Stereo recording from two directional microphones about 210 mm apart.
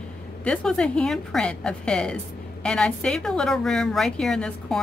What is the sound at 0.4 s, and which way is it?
A woman's voice, 5° left (ahead or behind).